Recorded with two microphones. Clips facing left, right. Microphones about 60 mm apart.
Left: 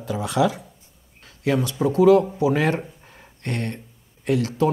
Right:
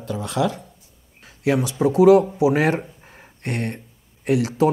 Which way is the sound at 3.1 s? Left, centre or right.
Centre.